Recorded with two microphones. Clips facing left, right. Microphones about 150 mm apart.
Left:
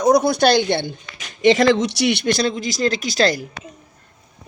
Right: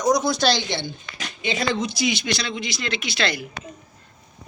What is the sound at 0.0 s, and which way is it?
Speech, 60° left (ahead or behind).